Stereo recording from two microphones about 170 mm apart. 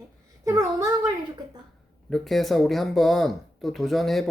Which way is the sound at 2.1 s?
Centre (ahead or behind).